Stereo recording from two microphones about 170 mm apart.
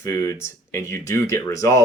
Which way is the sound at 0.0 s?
15° left (ahead or behind).